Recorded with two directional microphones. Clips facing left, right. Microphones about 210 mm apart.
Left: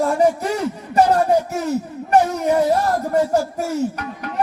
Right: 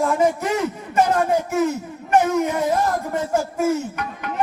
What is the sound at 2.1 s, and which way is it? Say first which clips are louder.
Speech: left 2 dB; 40° left (ahead or behind).